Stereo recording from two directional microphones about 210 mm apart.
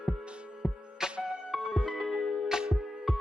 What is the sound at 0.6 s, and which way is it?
Music, 10° left (ahead or behind).